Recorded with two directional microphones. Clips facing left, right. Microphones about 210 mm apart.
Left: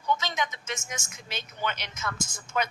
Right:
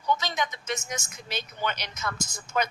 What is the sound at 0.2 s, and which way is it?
A woman's voice, 40° right (ahead or behind).